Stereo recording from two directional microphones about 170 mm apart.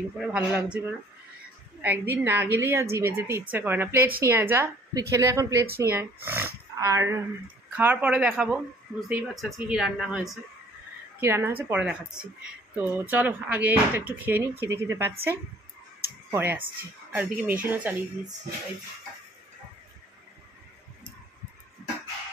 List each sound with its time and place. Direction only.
0.2 s speech: 5° right (ahead or behind)
11.1 s speech: 15° right (ahead or behind)
16.3 s speech: 10° right (ahead or behind)